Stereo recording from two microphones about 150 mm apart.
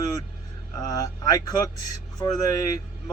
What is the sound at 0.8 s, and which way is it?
Speech, 25° left (ahead or behind).